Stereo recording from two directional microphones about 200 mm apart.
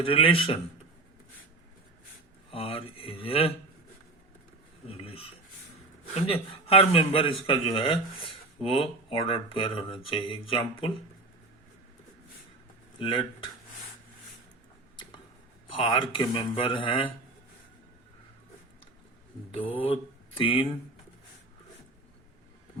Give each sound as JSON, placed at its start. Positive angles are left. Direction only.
{"t": 0.0, "sound": "a man's voice", "side_deg": 25}
{"t": 2.5, "sound": "speech", "side_deg": 25}
{"t": 4.9, "sound": "a man's voice", "side_deg": 30}
{"t": 13.0, "sound": "a man's voice", "side_deg": 25}
{"t": 15.7, "sound": "a man's voice", "side_deg": 25}
{"t": 19.5, "sound": "speech", "side_deg": 25}